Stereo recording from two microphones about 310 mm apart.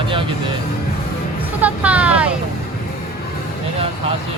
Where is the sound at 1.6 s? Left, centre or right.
Centre.